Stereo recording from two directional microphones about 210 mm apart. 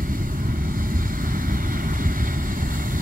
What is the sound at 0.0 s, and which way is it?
Vehicle, 40° right (ahead or behind).